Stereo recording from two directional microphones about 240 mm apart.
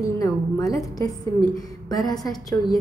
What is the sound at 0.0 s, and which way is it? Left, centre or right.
A woman's voice, centre.